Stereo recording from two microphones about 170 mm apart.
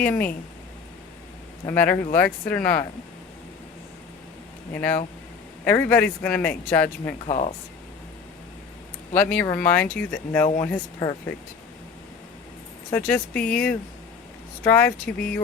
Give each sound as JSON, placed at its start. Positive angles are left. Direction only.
{"t": 0.0, "sound": "speech", "side_deg": 10}
{"t": 1.6, "sound": "speech", "side_deg": 10}
{"t": 4.7, "sound": "speech", "side_deg": 10}
{"t": 7.3, "sound": "speech", "side_deg": 40}
{"t": 9.1, "sound": "speech", "side_deg": 10}
{"t": 12.9, "sound": "speech", "side_deg": 10}